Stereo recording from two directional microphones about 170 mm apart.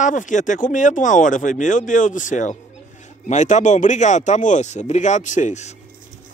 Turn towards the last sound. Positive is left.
turn(degrees=40)  # may be behind; listen again after turning